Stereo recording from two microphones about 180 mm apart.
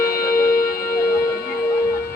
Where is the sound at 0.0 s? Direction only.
55° left (ahead or behind).